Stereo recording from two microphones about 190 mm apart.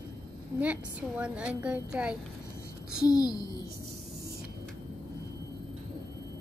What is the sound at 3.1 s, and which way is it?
Speech, 20° left (ahead or behind).